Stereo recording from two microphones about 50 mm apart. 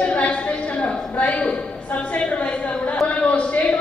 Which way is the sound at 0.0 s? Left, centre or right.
Left.